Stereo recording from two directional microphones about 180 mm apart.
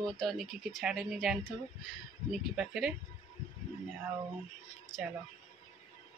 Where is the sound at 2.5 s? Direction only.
5° right (ahead or behind).